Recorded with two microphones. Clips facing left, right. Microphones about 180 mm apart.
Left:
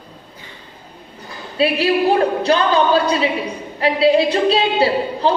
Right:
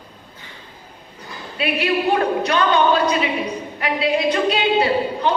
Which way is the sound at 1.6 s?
30° left (ahead or behind).